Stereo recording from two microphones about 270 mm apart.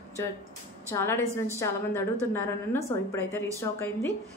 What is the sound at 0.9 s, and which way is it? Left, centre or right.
A woman's voice, centre.